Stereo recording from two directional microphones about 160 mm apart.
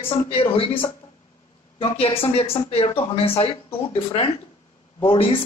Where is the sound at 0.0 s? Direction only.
35° left (ahead or behind).